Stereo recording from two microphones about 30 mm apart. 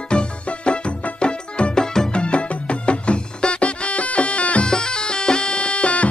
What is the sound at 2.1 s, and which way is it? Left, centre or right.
Music, left.